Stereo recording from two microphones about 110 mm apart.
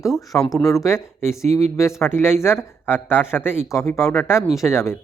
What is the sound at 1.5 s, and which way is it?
Speech, 85° right.